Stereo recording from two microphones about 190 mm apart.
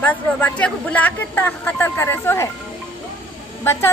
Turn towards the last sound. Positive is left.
turn(degrees=15)  # may be behind; listen again after turning